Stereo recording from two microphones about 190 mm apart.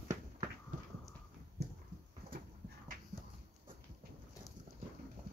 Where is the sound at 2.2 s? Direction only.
50° right (ahead or behind).